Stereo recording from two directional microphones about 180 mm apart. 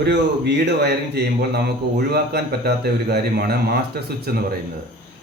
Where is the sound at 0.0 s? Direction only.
70° right (ahead or behind).